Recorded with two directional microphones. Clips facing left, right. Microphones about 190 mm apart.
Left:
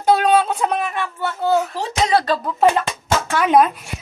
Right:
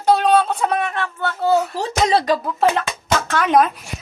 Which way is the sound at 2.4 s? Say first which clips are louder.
Left 2 dB; centre (ahead or behind).